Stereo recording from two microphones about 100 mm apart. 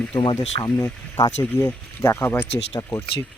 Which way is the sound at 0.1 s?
55° left (ahead or behind).